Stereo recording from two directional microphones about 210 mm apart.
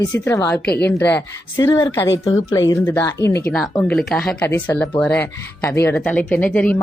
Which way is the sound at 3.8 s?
5° left (ahead or behind).